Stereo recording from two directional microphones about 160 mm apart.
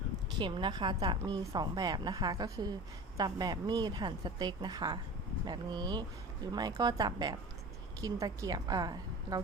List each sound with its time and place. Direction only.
0.3 s speech: 30° right (ahead or behind)